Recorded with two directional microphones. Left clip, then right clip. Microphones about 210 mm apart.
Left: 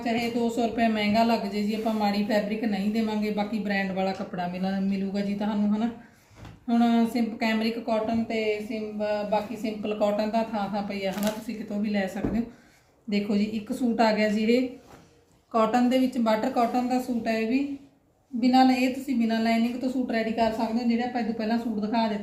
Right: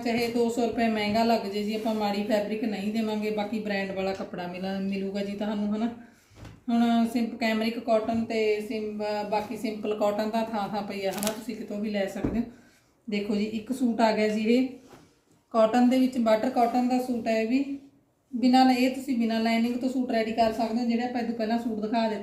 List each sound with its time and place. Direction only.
0.0 s a woman's voice: 5° right (ahead or behind)